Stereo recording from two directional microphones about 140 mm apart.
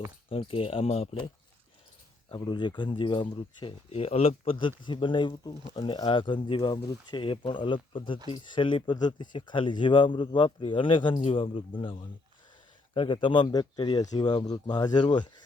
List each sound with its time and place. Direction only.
0.3 s speech: 40° left (ahead or behind)
2.3 s speech: 30° left (ahead or behind)